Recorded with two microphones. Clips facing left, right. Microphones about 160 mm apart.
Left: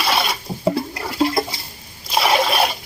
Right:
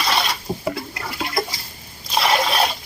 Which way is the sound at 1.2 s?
25° left (ahead or behind).